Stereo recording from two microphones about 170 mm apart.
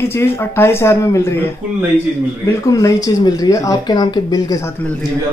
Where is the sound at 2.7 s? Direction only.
20° left (ahead or behind).